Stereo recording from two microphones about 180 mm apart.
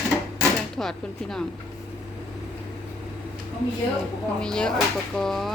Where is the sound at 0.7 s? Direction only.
Centre (ahead or behind).